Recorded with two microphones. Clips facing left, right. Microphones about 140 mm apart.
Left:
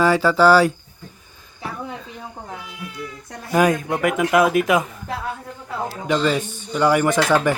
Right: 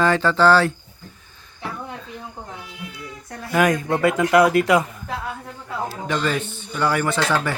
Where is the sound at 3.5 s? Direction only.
10° left (ahead or behind).